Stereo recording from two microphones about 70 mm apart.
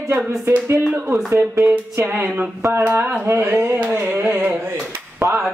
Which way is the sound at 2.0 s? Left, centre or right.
Right.